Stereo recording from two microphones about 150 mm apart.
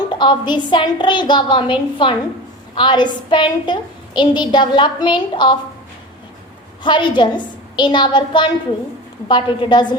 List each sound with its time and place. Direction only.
0.1 s a woman's voice: 30° left (ahead or behind)
6.8 s a woman's voice: 30° left (ahead or behind)